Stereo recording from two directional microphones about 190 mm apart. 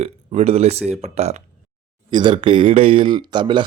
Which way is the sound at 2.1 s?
25° right (ahead or behind).